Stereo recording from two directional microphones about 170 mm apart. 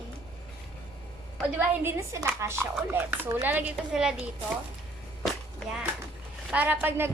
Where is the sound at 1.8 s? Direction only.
15° right (ahead or behind).